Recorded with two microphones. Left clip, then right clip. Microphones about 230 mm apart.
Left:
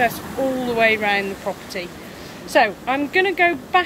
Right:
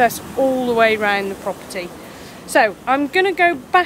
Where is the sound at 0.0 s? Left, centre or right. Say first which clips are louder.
Right 4 dB; centre.